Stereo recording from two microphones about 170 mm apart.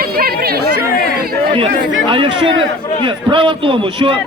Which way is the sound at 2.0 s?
30° right (ahead or behind).